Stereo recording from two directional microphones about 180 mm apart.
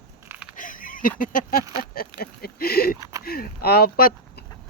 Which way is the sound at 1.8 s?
55° left (ahead or behind).